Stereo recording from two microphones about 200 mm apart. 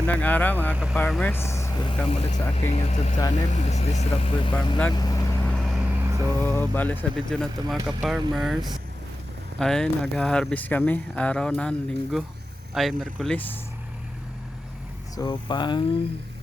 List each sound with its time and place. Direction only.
0.1 s speech: 5° left (ahead or behind)
0.7 s speech: 5° right (ahead or behind)
0.9 s speech: 5° left (ahead or behind)
2.0 s speech: 30° left (ahead or behind)
4.9 s vehicle: 20° left (ahead or behind)
5.5 s vehicle: 5° left (ahead or behind); by 6.3 s 15° right (ahead or behind)
6.4 s speech: 10° left (ahead or behind)
9.6 s speech: 5° left (ahead or behind)
15.1 s speech: 20° left (ahead or behind)